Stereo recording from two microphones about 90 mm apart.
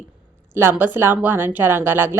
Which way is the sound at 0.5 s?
25° right (ahead or behind).